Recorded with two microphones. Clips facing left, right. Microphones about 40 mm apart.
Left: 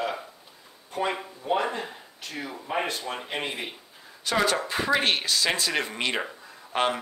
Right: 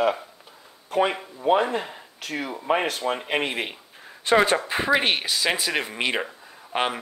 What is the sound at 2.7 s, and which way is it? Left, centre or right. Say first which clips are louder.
Speech: right 6 dB; right.